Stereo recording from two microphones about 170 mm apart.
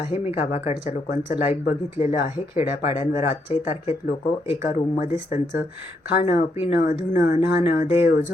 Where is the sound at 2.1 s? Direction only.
15° right (ahead or behind).